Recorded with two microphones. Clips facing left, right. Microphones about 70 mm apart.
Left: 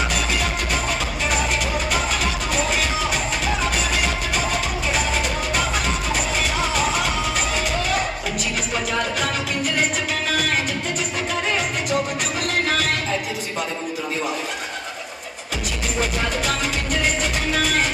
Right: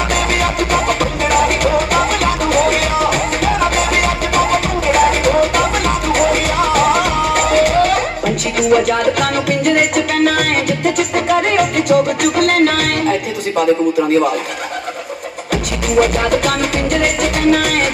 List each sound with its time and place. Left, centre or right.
0.1 s music: right
16.0 s music: right